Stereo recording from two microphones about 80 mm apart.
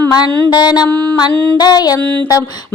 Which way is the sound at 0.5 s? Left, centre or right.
Left.